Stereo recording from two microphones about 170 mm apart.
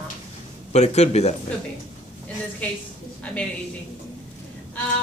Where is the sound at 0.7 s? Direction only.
40° left (ahead or behind).